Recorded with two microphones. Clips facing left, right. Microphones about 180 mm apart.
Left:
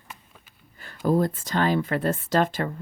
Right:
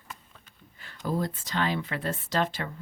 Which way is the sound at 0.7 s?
50° left (ahead or behind).